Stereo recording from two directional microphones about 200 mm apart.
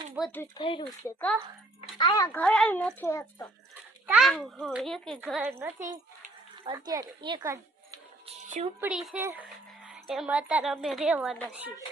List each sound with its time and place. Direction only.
0.2 s a child's voice: 10° left (ahead or behind)
0.5 s speech: 25° left (ahead or behind)
1.0 s a child's voice: 10° left (ahead or behind)
2.0 s a child's voice: 20° left (ahead or behind)
2.4 s a child's voice: 5° left (ahead or behind)
4.0 s a child's voice: 10° right (ahead or behind)
5.2 s speech: 10° right (ahead or behind)
8.4 s speech: 40° right (ahead or behind)
8.8 s speech: 5° right (ahead or behind)